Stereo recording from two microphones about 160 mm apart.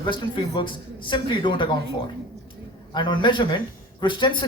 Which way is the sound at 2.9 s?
30° left (ahead or behind).